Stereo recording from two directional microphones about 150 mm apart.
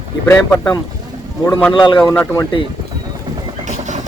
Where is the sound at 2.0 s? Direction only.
20° left (ahead or behind).